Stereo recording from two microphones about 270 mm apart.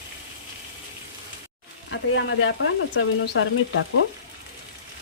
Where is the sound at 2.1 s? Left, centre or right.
Left.